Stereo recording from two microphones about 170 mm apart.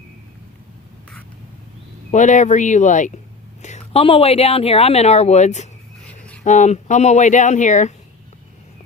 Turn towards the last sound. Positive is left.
turn(degrees=45)  # may be behind; listen again after turning